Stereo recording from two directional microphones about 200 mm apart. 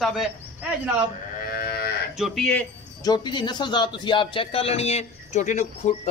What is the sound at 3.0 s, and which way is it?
Speech, 20° left (ahead or behind).